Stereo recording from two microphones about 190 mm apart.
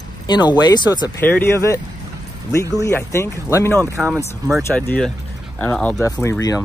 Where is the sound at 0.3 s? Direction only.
20° left (ahead or behind).